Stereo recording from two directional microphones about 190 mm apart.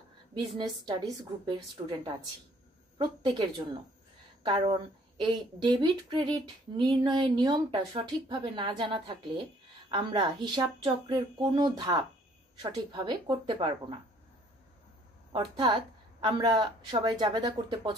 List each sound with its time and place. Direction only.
0.3 s a woman's voice: 25° right (ahead or behind)
4.5 s a woman's voice: 25° right (ahead or behind)
15.3 s a woman's voice: 25° right (ahead or behind)